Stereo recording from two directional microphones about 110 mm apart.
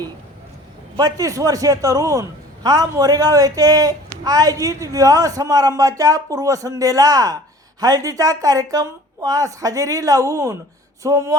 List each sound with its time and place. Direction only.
0.9 s a man's voice: 35° right (ahead or behind)